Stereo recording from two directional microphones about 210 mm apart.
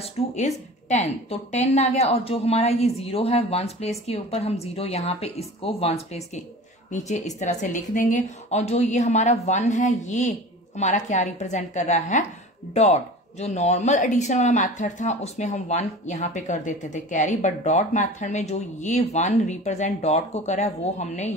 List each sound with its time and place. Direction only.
0.0 s speech: 35° left (ahead or behind)